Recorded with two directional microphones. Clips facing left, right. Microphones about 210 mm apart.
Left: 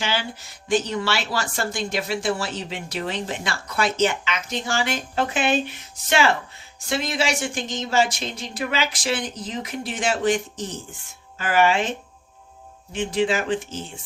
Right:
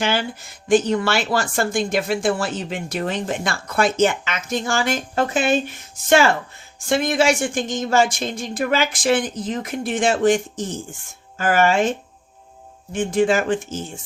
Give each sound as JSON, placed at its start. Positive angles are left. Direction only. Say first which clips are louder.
{"t": 0.0, "sound": "speech", "louder": "right 5 dB", "side_deg": -50}
{"t": 12.9, "sound": "speech", "louder": "right 4 dB", "side_deg": -50}